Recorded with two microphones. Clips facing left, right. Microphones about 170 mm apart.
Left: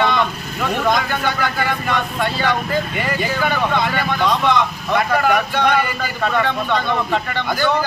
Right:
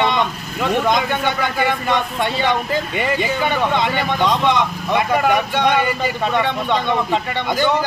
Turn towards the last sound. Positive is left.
turn(degrees=-20)  # may be behind; listen again after turning